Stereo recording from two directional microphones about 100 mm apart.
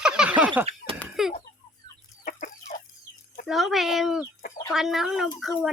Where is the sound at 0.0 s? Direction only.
10° right (ahead or behind).